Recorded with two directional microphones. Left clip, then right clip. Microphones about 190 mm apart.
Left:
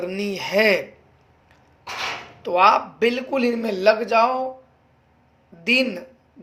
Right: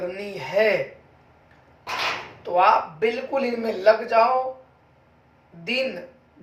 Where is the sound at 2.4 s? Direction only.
65° left (ahead or behind).